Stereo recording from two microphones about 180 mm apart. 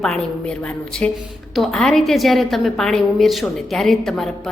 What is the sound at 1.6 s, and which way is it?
A woman's voice, centre (ahead or behind).